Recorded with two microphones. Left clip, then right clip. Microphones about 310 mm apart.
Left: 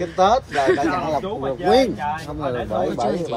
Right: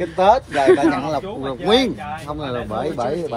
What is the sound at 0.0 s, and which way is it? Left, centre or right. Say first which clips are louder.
Speech: right 2 dB; right.